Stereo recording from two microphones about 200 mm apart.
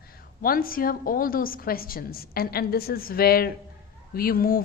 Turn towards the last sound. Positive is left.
turn(degrees=45)  # may be behind; listen again after turning